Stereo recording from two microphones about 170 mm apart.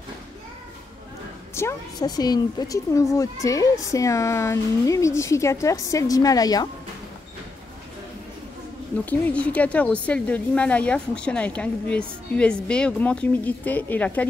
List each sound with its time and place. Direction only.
1.5 s a woman's voice: 15° left (ahead or behind)
9.0 s a woman's voice: 10° left (ahead or behind)